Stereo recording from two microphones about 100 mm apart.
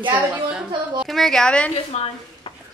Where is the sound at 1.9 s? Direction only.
90° left.